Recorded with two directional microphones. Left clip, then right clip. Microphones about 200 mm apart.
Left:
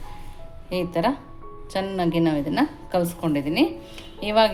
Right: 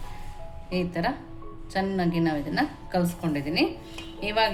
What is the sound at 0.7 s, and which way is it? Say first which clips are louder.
A woman's voice: left 5 dB; 40° left (ahead or behind).